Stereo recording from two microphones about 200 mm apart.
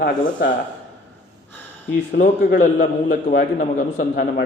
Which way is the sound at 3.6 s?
40° left (ahead or behind).